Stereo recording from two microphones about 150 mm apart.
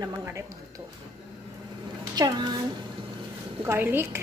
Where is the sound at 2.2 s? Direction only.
25° right (ahead or behind).